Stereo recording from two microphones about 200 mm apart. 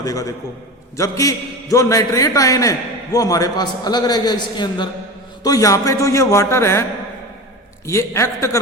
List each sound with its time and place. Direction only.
0.0 s a man's voice: 15° left (ahead or behind)
7.9 s a man's voice: 15° left (ahead or behind)